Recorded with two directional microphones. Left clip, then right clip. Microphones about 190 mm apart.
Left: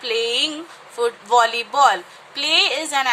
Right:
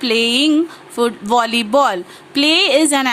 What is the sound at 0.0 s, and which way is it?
A woman's voice, 50° right (ahead or behind).